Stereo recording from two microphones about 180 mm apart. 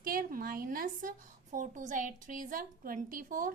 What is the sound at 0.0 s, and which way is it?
A woman's voice, 55° right (ahead or behind).